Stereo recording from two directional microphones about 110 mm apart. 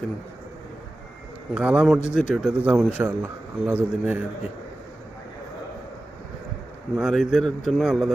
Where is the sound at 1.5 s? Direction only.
10° right (ahead or behind).